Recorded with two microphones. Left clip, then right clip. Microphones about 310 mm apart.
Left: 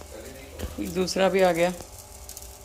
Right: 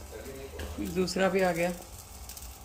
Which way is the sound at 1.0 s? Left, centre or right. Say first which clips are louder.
Left 6 dB; centre.